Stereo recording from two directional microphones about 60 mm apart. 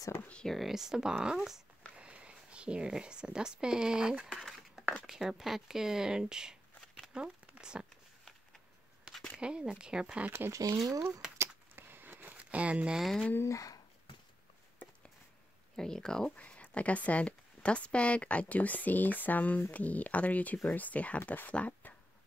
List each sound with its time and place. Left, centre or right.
0.5 s speech: centre
2.0 s speech: centre
4.4 s a sound: centre
5.0 s speech: centre
7.2 s a sound: centre
9.4 s speech: centre
10.5 s speech: right
11.3 s a sound: right; by 13.0 s centre
13.0 s speech: centre
13.5 s speech: left
15.7 s speech: centre
16.3 s a sound: left
16.7 s speech: left